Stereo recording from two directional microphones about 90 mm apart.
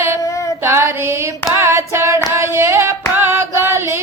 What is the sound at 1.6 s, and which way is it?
Hands, 30° right (ahead or behind).